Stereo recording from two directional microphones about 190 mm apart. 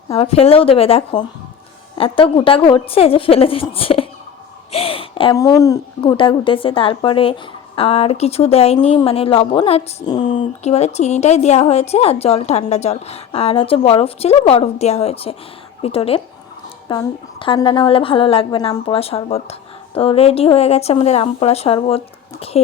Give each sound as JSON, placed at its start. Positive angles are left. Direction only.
{"t": 0.1, "sound": "a woman's voice", "side_deg": 30}
{"t": 4.7, "sound": "a sound", "side_deg": 30}
{"t": 6.1, "sound": "a woman's voice", "side_deg": 25}